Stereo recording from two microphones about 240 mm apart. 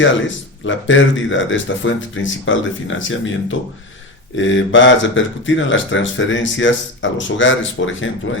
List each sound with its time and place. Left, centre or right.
0.6 s speech: left